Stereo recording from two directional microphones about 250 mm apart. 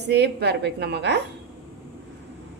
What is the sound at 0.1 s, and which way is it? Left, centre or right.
A woman's voice, right.